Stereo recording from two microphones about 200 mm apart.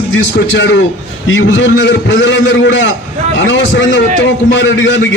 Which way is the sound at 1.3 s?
70° left (ahead or behind).